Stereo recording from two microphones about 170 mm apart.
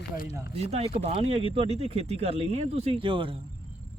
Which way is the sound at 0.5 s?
35° right (ahead or behind).